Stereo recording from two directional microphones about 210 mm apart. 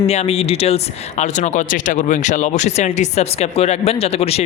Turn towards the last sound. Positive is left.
turn(degrees=30)  # may be behind; listen again after turning